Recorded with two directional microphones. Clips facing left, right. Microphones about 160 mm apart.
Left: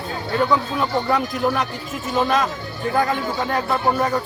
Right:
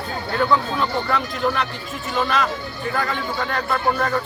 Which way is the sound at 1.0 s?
15° left (ahead or behind).